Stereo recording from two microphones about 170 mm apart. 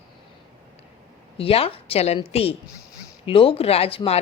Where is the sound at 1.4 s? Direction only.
35° left (ahead or behind).